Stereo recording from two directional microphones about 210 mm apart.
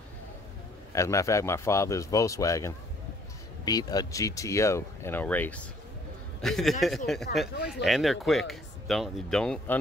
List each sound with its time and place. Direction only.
0.9 s speech: 15° left (ahead or behind)
7.5 s speech: 50° left (ahead or behind)
7.8 s speech: centre (ahead or behind)